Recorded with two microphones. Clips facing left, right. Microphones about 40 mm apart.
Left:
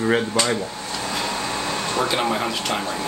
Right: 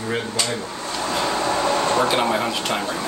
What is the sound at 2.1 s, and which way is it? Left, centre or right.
Speech, centre.